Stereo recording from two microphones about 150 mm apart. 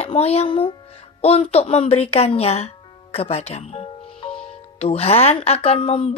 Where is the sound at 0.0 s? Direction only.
45° left (ahead or behind).